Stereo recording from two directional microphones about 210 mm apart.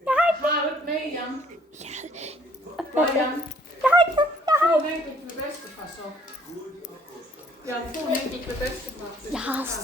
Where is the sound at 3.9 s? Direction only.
20° right (ahead or behind).